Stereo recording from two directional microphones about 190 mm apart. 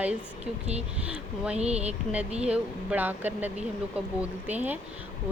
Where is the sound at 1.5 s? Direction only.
35° right (ahead or behind).